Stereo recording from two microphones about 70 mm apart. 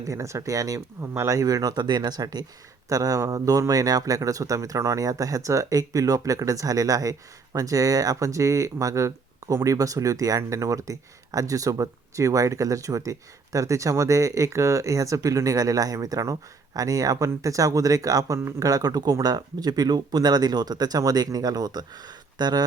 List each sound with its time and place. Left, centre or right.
0.0 s speech: right
1.1 s speech: right
1.4 s speech: right
2.9 s speech: right